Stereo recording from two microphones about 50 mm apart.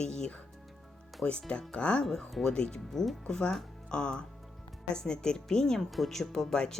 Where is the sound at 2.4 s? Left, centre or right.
Centre.